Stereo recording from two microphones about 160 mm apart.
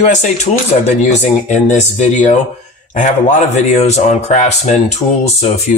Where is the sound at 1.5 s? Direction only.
50° left (ahead or behind).